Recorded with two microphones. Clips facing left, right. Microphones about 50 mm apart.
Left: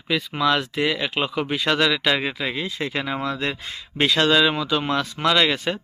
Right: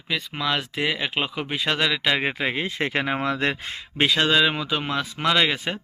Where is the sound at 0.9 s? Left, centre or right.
Centre.